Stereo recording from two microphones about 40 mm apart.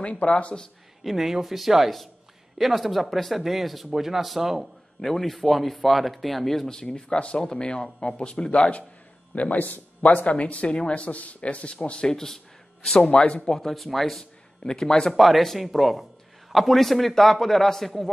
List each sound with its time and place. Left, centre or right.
0.0 s speech: left
1.0 s speech: centre
5.0 s speech: centre
6.8 s speech: centre
9.3 s speech: left
12.1 s speech: centre
13.6 s speech: centre
14.6 s speech: centre
15.1 s speech: centre